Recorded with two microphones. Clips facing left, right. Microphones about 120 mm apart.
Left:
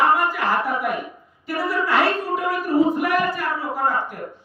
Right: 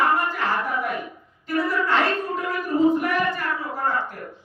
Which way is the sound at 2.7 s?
35° left (ahead or behind).